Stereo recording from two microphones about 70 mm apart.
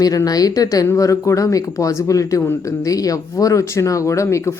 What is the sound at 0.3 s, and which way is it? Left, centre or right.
Speech, left.